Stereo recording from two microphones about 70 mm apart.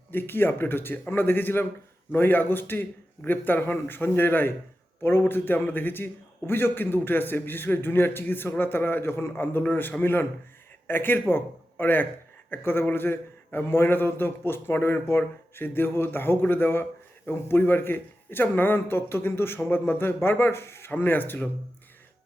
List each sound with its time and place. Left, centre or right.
0.1 s a man's voice: left